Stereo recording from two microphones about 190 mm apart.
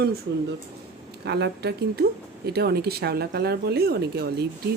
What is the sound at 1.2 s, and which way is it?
Speech, 60° right (ahead or behind).